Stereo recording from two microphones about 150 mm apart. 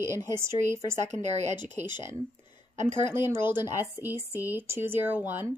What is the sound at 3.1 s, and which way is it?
Speech, 15° right (ahead or behind).